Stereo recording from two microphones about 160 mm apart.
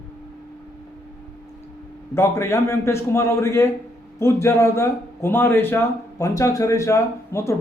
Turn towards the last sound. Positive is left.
turn(degrees=20)  # may be behind; listen again after turning